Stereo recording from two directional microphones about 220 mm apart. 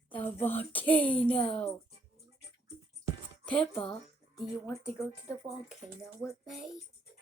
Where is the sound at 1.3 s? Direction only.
25° left (ahead or behind).